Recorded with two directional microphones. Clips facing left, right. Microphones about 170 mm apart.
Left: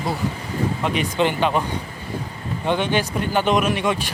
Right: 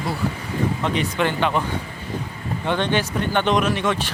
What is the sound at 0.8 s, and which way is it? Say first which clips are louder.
Speech: left 4 dB; 15° left (ahead or behind).